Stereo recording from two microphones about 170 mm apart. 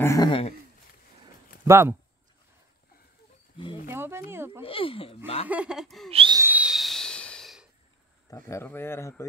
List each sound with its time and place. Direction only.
0.0 s speech: 20° left (ahead or behind)
0.3 s speech: 35° left (ahead or behind)
1.6 s speech: 15° right (ahead or behind)
3.8 s speech: 15° right (ahead or behind)
4.6 s speech: 30° left (ahead or behind)
5.5 s speech: 5° right (ahead or behind)
6.0 s owl: 35° right (ahead or behind)
6.3 s owl: 10° right (ahead or behind)
8.3 s speech: 15° left (ahead or behind)